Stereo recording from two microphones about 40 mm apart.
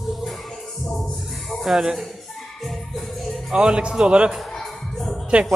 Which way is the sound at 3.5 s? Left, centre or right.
Right.